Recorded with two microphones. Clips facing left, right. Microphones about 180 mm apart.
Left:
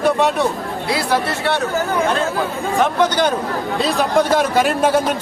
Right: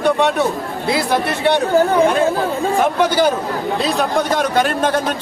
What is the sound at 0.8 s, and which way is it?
Speech, 20° right (ahead or behind).